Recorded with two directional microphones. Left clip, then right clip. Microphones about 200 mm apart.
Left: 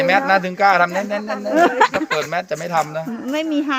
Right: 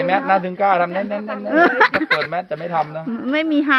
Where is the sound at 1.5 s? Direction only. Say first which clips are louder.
Right 1 dB; 15° right (ahead or behind).